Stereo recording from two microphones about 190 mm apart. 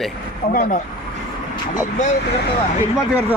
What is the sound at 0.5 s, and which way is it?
Speech, 45° left (ahead or behind).